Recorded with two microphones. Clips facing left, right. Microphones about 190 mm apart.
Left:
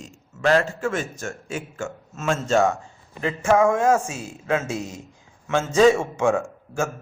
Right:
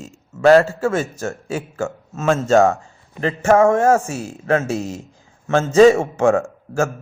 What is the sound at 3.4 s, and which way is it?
Speech, 45° right (ahead or behind).